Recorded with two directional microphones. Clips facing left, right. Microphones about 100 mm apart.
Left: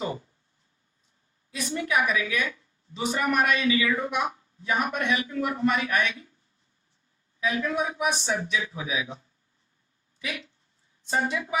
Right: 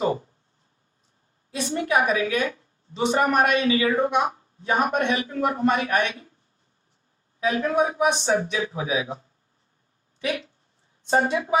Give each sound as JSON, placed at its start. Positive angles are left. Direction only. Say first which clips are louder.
{"t": 0.0, "sound": "a sound", "louder": "right 7 dB", "side_deg": -40}
{"t": 1.5, "sound": "a woman's voice", "louder": "right 4 dB", "side_deg": -35}
{"t": 7.3, "sound": "a woman's voice", "louder": "right 5 dB", "side_deg": -35}